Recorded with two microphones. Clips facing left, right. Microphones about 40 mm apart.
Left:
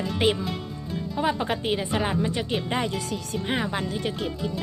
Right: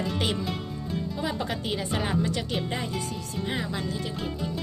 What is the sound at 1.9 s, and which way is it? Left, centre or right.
Speech, centre.